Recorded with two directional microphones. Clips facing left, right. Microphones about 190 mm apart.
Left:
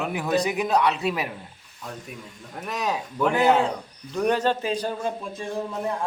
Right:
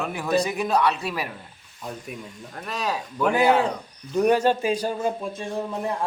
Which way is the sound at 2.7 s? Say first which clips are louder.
Left 1 dB; 20° left (ahead or behind).